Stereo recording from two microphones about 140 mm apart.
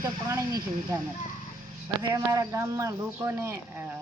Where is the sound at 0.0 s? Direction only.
25° right (ahead or behind).